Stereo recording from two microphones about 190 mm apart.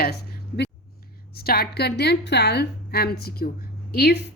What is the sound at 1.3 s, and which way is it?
A woman's voice, 55° left (ahead or behind).